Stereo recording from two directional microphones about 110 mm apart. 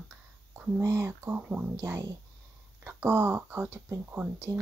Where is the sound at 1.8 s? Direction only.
30° right (ahead or behind).